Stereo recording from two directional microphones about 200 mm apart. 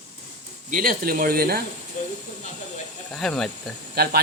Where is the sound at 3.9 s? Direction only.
50° right (ahead or behind).